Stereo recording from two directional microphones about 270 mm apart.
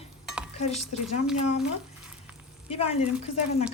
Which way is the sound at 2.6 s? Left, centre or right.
Left.